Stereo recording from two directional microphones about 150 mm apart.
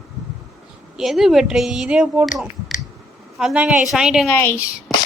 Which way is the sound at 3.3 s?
5° right (ahead or behind).